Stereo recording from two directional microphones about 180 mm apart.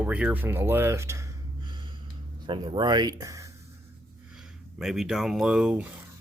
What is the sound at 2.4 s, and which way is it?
Speech, 25° right (ahead or behind).